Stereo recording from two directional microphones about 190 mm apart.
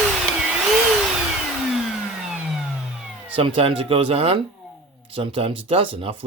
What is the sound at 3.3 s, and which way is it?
Speech, 30° right (ahead or behind).